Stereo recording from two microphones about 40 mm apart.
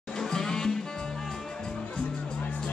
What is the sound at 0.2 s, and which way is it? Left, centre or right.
Music, centre.